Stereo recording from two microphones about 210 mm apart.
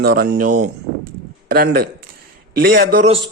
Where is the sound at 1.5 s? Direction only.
45° right (ahead or behind).